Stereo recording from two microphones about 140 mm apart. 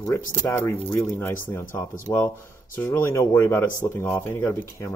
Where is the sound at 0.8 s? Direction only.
15° left (ahead or behind).